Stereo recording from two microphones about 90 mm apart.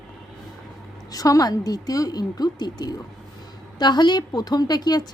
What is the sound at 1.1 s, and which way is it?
A woman's voice, 40° left (ahead or behind).